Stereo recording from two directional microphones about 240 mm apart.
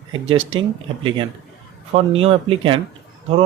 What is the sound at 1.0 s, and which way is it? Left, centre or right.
Speech, right.